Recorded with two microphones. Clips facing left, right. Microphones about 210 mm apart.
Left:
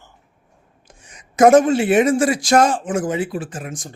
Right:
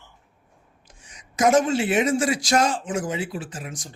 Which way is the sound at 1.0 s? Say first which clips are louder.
Left 8 dB; 55° left (ahead or behind).